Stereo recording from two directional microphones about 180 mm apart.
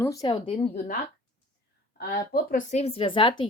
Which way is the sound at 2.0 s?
60° left (ahead or behind).